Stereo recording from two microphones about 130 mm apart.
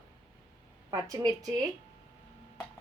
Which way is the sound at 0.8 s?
25° right (ahead or behind).